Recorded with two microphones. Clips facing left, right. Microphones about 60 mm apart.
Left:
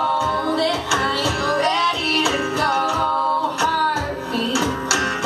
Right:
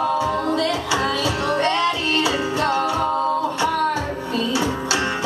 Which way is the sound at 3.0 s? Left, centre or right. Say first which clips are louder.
Left 1 dB; right.